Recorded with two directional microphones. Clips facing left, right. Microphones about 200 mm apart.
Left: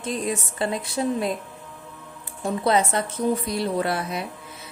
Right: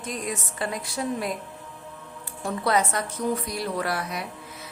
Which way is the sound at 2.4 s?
25° left (ahead or behind).